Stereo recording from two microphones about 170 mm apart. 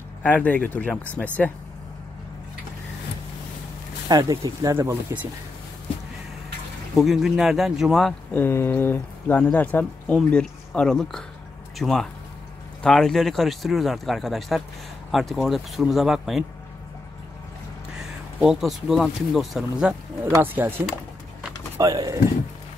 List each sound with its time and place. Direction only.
0.2 s speech: 10° left (ahead or behind)
4.1 s speech: 20° right (ahead or behind)
7.0 s speech: centre (ahead or behind)
17.9 s speech: centre (ahead or behind)
21.7 s speech: 20° right (ahead or behind)